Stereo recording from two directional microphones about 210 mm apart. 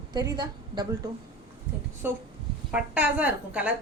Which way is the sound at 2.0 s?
10° right (ahead or behind).